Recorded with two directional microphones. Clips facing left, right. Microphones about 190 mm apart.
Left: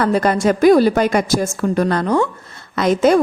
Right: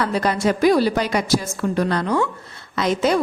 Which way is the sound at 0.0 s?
50° left (ahead or behind).